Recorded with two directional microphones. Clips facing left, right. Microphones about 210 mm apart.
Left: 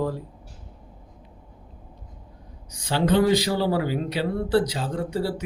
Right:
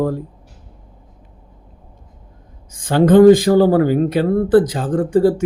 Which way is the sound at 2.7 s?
50° right (ahead or behind).